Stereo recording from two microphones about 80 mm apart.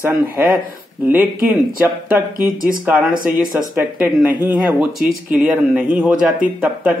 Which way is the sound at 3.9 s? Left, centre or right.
Right.